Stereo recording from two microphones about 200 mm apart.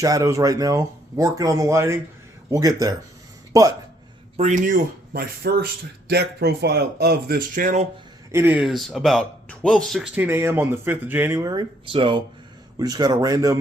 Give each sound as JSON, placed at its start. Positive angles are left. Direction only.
{"t": 0.0, "sound": "speech", "side_deg": -15}
{"t": 4.4, "sound": "speech", "side_deg": -35}
{"t": 8.3, "sound": "speech", "side_deg": -10}